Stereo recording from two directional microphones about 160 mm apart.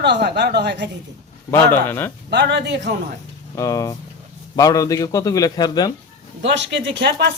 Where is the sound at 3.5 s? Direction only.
20° left (ahead or behind).